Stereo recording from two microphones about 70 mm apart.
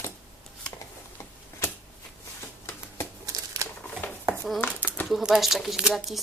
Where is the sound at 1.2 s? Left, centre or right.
Left.